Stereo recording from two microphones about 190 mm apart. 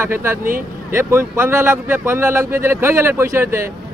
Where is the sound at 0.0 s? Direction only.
15° right (ahead or behind).